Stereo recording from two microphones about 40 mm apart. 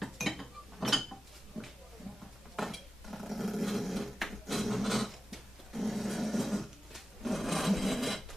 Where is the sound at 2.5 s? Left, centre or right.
Centre.